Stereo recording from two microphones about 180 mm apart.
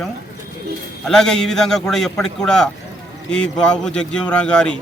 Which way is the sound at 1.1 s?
5° left (ahead or behind).